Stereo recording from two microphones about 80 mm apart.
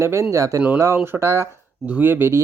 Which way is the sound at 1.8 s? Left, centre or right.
Centre.